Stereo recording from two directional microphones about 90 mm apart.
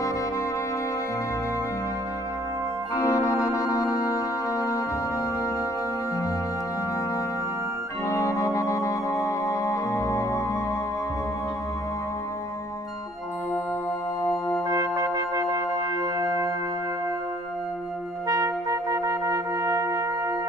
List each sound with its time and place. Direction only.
3.0 s organ: 35° left (ahead or behind)
8.1 s music: 35° left (ahead or behind)
14.2 s music: 30° left (ahead or behind)
14.7 s music: 40° right (ahead or behind)
18.3 s trumpet: 40° right (ahead or behind)